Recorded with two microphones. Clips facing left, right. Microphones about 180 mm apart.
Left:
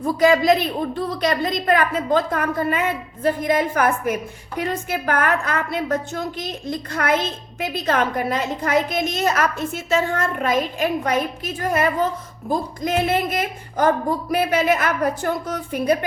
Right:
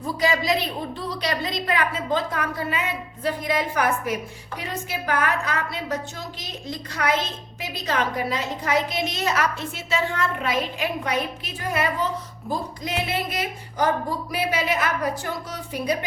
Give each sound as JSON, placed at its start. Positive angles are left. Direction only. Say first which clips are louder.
{"t": 0.0, "sound": "a woman's voice", "louder": "left 7 dB", "side_deg": 50}